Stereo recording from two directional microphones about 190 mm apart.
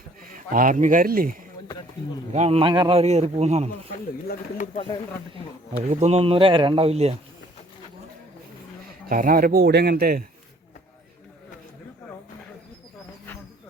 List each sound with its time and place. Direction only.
0.3 s speech: 45° right (ahead or behind)
2.0 s speech: 25° left (ahead or behind)
2.3 s a man's voice: 35° right (ahead or behind)
4.3 s speech: 45° left (ahead or behind)
5.9 s a man's voice: 35° right (ahead or behind)
9.0 s speech: 45° right (ahead or behind)